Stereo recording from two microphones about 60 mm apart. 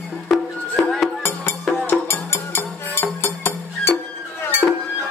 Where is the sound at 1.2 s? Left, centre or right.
Left.